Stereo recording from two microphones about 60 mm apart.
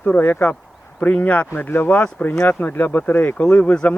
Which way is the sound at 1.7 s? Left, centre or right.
Left.